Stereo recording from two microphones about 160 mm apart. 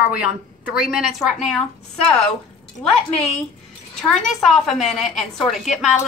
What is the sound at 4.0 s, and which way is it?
A woman's voice, centre (ahead or behind).